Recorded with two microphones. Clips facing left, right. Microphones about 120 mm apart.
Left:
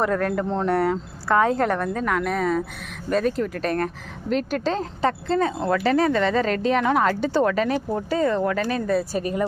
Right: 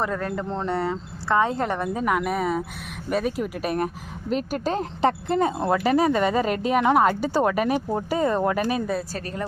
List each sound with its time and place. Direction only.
0.1 s speech: 5° right (ahead or behind)
9.1 s speech: 15° left (ahead or behind)